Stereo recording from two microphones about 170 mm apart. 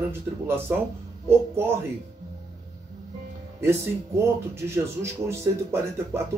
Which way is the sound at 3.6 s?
15° right (ahead or behind).